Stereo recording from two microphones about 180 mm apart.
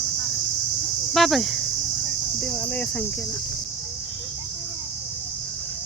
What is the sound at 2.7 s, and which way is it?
Speech, 10° left (ahead or behind).